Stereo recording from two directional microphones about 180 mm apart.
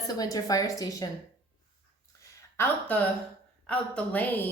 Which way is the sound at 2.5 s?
10° left (ahead or behind).